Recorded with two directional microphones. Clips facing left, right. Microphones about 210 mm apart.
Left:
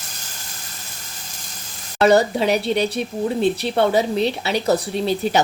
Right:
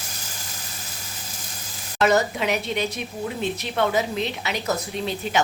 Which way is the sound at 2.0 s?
35° left (ahead or behind).